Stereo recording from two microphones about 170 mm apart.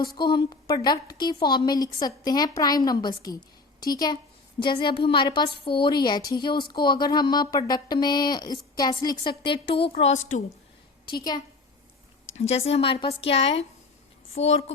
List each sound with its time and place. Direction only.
0.2 s a woman's voice: 25° left (ahead or behind)
10.0 s a woman's voice: 40° left (ahead or behind)
12.4 s a woman's voice: 35° left (ahead or behind)